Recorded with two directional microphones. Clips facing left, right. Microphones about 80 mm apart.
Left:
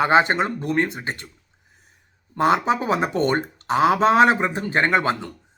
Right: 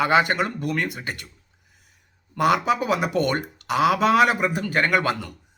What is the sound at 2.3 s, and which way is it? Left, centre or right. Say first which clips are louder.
Speech: left 1 dB; left.